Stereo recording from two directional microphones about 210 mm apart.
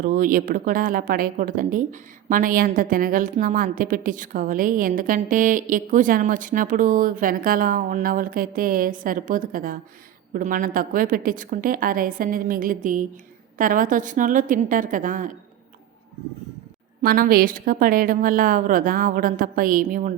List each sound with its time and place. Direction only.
0.0 s a woman's voice: 40° right (ahead or behind)
17.0 s a woman's voice: 45° right (ahead or behind)